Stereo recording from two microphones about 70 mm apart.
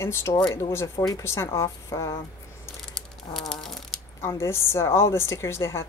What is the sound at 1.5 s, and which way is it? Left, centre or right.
Speech, left.